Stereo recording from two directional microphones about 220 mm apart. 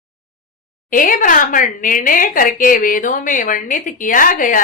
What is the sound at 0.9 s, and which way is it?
A woman's voice, 40° left (ahead or behind).